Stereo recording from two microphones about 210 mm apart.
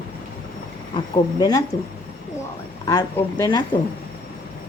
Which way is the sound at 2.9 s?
15° left (ahead or behind).